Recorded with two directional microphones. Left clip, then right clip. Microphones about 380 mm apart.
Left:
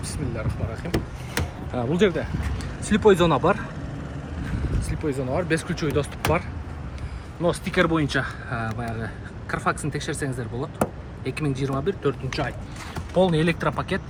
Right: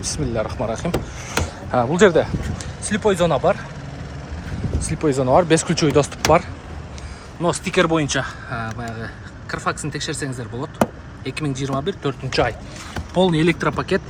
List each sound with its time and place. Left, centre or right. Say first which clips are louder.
0.0 s speech: right 8 dB; centre
1.7 s speech: right 7 dB; centre
3.0 s speech: right 1 dB; right
4.9 s speech: right 10 dB; centre
7.4 s speech: right 4 dB; centre